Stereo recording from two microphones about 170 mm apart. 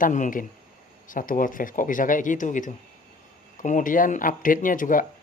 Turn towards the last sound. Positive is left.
turn(degrees=50)  # may be behind; listen again after turning